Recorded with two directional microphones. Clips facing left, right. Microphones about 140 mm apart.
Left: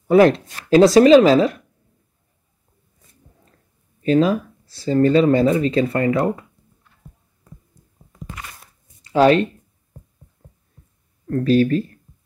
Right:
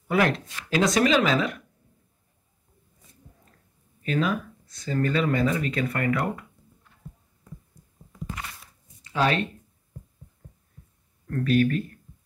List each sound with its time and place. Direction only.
0.1 s speech: 30° left (ahead or behind)
4.0 s speech: 30° left (ahead or behind)
9.0 s speech: 35° left (ahead or behind)
11.2 s speech: 30° left (ahead or behind)